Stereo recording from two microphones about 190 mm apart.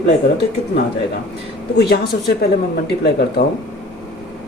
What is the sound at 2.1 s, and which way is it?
Speech, 50° left (ahead or behind).